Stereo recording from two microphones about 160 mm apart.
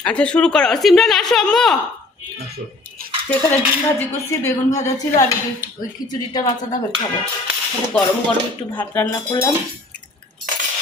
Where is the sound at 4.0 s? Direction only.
15° left (ahead or behind).